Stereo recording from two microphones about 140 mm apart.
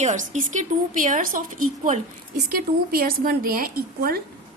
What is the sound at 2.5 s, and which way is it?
A woman's voice, 90° right.